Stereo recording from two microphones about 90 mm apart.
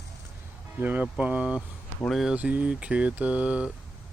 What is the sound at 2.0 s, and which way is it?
Speech, centre (ahead or behind).